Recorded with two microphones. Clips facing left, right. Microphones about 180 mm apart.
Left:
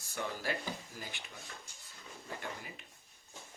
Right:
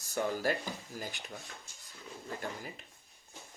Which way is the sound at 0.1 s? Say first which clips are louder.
Right 6 dB; 45° right (ahead or behind).